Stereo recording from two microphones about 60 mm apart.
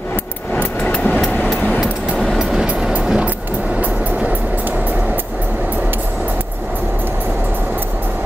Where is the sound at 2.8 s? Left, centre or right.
Centre.